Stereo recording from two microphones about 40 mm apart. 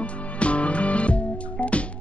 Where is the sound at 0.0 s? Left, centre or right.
Left.